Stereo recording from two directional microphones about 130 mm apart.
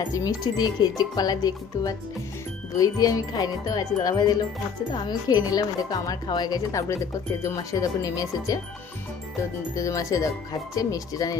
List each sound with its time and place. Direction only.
0.1 s speech: 30° left (ahead or behind)
9.7 s speech: 25° left (ahead or behind)